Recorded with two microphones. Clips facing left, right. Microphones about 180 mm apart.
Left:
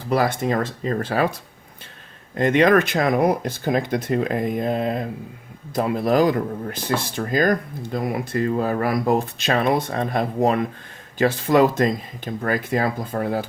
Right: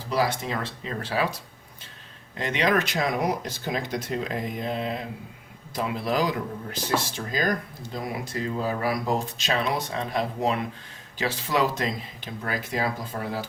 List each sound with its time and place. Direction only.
0.1 s speech: 55° left (ahead or behind)